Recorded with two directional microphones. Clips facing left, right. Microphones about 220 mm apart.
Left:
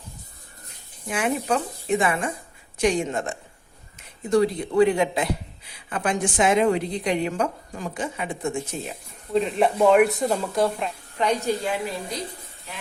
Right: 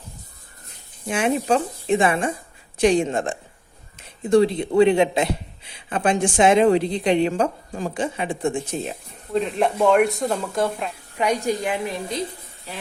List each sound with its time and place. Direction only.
1.0 s a woman's voice: 25° right (ahead or behind)
9.3 s speech: centre (ahead or behind)
11.2 s a woman's voice: 10° right (ahead or behind)